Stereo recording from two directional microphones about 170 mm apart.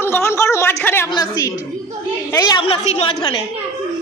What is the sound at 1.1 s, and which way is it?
A woman's voice, 25° left (ahead or behind).